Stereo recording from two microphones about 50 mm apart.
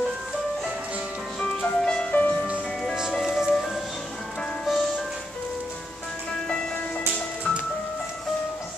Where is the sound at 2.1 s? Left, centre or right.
Left.